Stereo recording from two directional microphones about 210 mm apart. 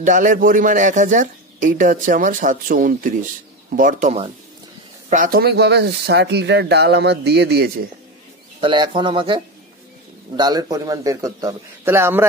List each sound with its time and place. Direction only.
0.0 s speech: 35° right (ahead or behind)
8.5 s speech: 20° right (ahead or behind)